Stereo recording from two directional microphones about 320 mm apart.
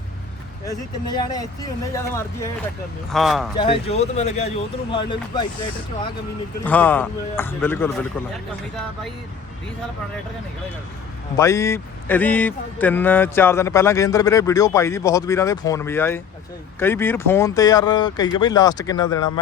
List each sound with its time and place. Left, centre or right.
0.7 s speech: centre
3.6 s speech: centre
6.7 s speech: centre
11.3 s speech: centre